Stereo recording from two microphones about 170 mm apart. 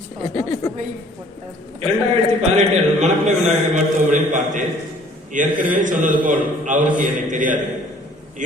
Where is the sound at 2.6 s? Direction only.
45° right (ahead or behind).